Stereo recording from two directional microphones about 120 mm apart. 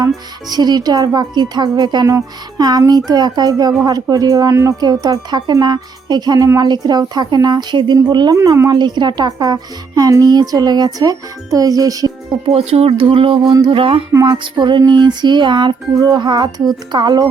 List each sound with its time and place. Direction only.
0.4 s a woman's voice: 35° right (ahead or behind)
12.5 s speech: 55° right (ahead or behind)
14.1 s speech: 30° right (ahead or behind)
14.3 s a woman's voice: 40° right (ahead or behind)